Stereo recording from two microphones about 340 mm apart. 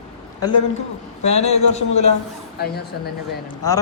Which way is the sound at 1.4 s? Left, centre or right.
Left.